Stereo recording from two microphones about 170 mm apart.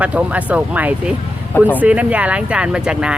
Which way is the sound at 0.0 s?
10° right (ahead or behind).